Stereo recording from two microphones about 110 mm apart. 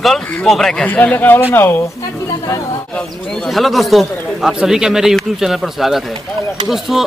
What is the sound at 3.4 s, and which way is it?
Speech, centre (ahead or behind).